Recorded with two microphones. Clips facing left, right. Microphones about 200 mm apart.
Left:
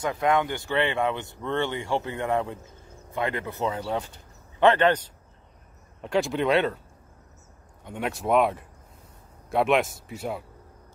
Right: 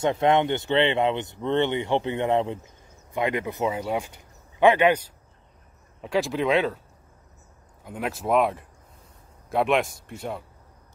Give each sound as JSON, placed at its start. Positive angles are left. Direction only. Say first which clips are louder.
{"t": 0.0, "sound": "speech", "louder": "right 3 dB", "side_deg": -25}
{"t": 7.8, "sound": "speech", "louder": "even", "side_deg": 0}